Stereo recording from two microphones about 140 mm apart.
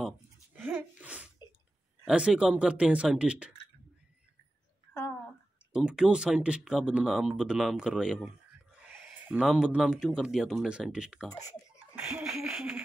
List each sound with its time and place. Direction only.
0.0 s a sound: 10° right (ahead or behind)
2.0 s speech: 5° right (ahead or behind)
5.7 s speech: 5° right (ahead or behind)
9.4 s speech: 5° right (ahead or behind)
11.2 s speech: 25° left (ahead or behind)
11.9 s a sound: 5° right (ahead or behind)